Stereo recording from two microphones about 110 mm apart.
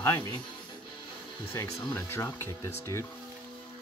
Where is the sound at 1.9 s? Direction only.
20° left (ahead or behind).